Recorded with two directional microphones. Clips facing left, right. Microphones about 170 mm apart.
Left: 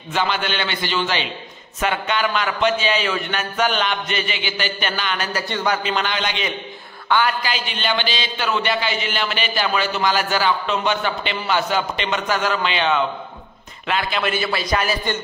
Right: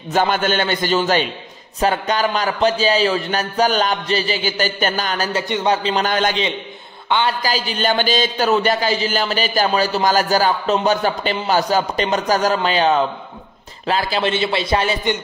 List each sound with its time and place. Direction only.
0.1 s a man's voice: 45° right (ahead or behind)
5.3 s a man's voice: 25° right (ahead or behind)
6.0 s a man's voice: 45° right (ahead or behind)
7.1 s a woman's voice: 25° right (ahead or behind)
7.4 s a man's voice: 40° right (ahead or behind)